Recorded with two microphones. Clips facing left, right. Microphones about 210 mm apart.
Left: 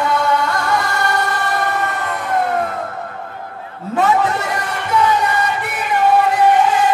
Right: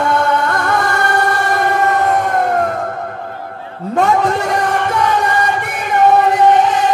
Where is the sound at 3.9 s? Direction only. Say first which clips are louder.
Right 2 dB; 45° right (ahead or behind).